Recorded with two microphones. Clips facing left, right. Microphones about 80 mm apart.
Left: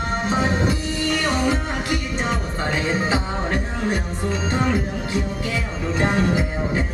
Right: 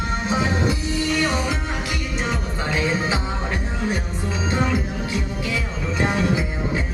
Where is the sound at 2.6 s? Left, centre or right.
Left.